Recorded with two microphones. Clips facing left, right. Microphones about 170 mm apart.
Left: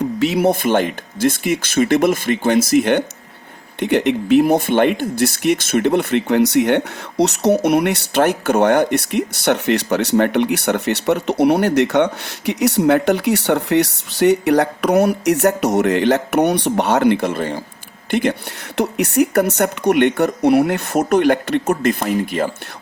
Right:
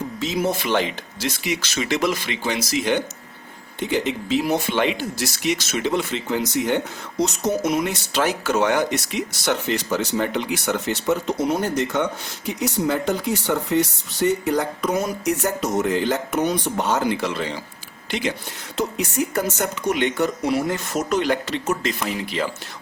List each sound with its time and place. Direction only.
0.2 s speech: 65° left (ahead or behind)
18.8 s speech: 65° left (ahead or behind); by 22.5 s 50° left (ahead or behind)